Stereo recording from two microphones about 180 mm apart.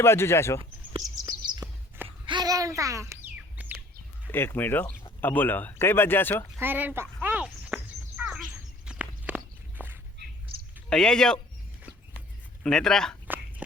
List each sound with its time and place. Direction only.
0.0 s speech: 15° left (ahead or behind)
0.6 s chirp: 20° right (ahead or behind)
4.3 s speech: 10° left (ahead or behind)
6.6 s a sound: 10° right (ahead or behind)
8.2 s bird: 5° right (ahead or behind)
8.9 s walk: 5° right (ahead or behind)
10.8 s speech: 5° left (ahead or behind)
12.6 s speech: 5° left (ahead or behind)